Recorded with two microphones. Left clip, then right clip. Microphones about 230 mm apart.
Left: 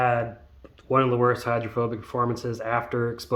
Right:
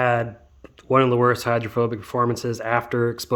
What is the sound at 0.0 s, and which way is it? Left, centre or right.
Speech, right.